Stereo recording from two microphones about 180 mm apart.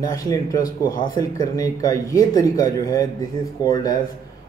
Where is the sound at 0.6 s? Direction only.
50° left (ahead or behind).